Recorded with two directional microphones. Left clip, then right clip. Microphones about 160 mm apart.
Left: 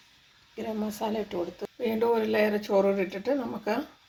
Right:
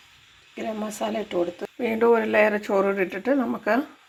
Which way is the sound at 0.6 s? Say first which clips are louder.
Right 4 dB; 15° right (ahead or behind).